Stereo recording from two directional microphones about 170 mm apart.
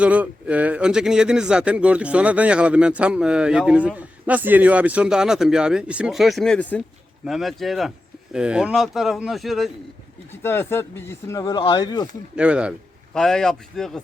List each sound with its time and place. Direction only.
0.0 s speech: 5° right (ahead or behind)
10.4 s speech: 15° left (ahead or behind)
12.4 s speech: 5° right (ahead or behind)